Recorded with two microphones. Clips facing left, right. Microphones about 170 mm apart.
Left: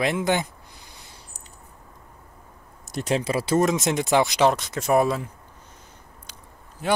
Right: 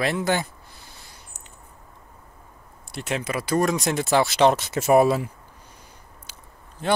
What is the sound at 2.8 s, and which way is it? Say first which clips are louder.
Speech: left 4 dB; 40° left (ahead or behind).